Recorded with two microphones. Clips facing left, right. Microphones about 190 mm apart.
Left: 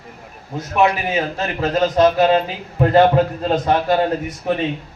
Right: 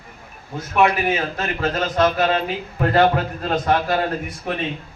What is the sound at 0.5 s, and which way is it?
A man's voice, 20° left (ahead or behind).